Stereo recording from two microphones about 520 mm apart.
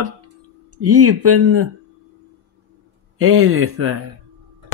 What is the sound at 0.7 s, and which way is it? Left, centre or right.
Speech, right.